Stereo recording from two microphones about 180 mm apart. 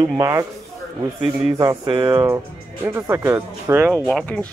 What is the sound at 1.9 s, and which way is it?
Speech, 25° right (ahead or behind).